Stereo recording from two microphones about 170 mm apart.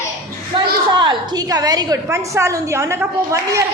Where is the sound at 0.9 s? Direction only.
25° right (ahead or behind).